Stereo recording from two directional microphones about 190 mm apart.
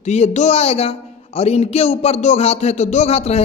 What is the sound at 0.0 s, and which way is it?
A man's voice, 35° left (ahead or behind).